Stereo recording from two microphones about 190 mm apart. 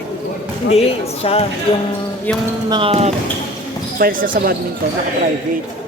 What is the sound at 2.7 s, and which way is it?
Speech, 25° right (ahead or behind).